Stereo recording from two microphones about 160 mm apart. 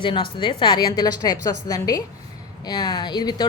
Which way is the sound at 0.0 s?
30° left (ahead or behind).